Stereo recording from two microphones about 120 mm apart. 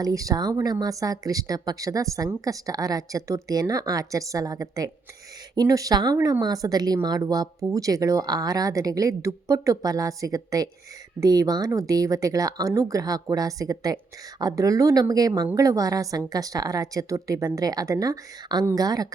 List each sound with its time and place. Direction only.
0.0 s speech: 30° right (ahead or behind)
6.1 s speech: 20° right (ahead or behind)